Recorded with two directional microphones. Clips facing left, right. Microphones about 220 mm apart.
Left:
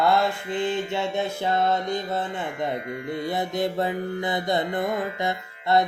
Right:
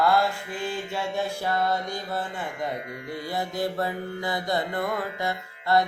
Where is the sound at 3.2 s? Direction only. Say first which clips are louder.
Left 2 dB; 20° left (ahead or behind).